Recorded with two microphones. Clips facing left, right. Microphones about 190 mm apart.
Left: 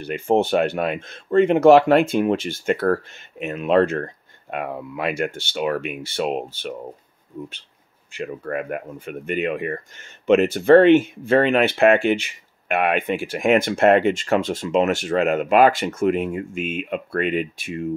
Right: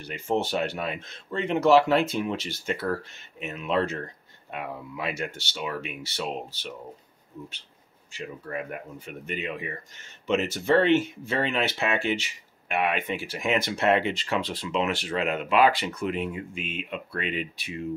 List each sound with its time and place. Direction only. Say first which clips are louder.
0.0 s speech: left 8 dB; 55° left (ahead or behind)
8.1 s speech: left 8 dB; 60° left (ahead or behind)